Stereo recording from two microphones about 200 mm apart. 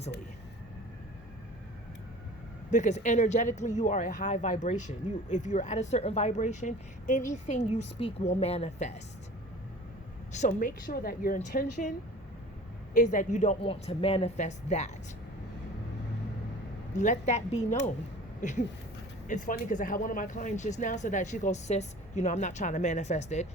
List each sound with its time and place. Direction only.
2.6 s speech: 35° left (ahead or behind)
10.3 s speech: 35° left (ahead or behind)
10.8 s speech: 50° left (ahead or behind)
16.9 s speech: 35° left (ahead or behind)